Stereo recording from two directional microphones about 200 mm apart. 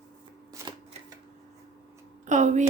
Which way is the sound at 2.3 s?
35° right (ahead or behind).